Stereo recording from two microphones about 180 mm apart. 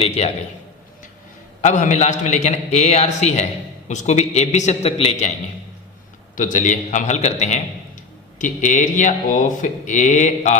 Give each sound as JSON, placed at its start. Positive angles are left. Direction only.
{"t": 0.0, "sound": "a man's voice", "side_deg": 35}
{"t": 1.6, "sound": "a man's voice", "side_deg": 45}
{"t": 6.3, "sound": "speech", "side_deg": 45}